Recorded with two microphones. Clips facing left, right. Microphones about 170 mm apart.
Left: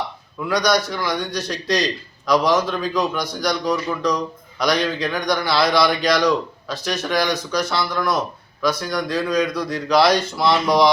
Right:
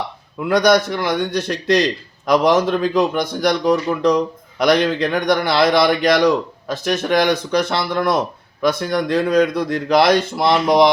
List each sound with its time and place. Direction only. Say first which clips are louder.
0.3 s a man's voice: right 5 dB; 55° right (ahead or behind)